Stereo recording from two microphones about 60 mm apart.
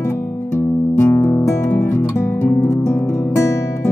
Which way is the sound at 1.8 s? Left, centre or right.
Left.